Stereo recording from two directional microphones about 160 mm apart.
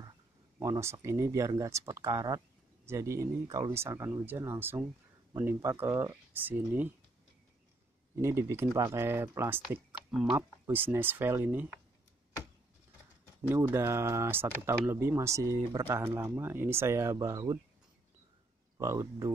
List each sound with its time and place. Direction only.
0.6 s speech: 15° right (ahead or behind)
8.2 s speech: 15° right (ahead or behind)
9.9 s speech: centre (ahead or behind)
10.7 s speech: 10° right (ahead or behind)
13.4 s speech: 15° right (ahead or behind)
18.8 s speech: 20° right (ahead or behind)